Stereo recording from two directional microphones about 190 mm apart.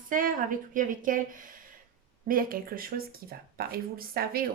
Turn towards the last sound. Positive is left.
turn(degrees=-50)  # may be behind; listen again after turning